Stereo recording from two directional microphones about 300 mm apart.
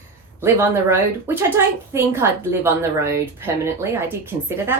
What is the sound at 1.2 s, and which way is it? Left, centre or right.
A woman's voice, centre.